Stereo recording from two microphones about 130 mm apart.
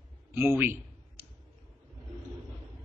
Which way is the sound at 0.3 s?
15° right (ahead or behind).